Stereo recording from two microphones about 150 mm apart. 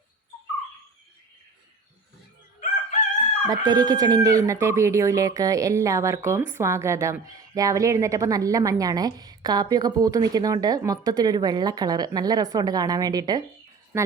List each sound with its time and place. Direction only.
2.6 s crowing: 55° left (ahead or behind)
3.7 s a woman's voice: 25° right (ahead or behind)